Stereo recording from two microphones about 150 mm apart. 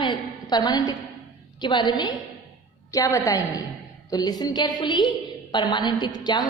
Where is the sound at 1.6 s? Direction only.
30° left (ahead or behind).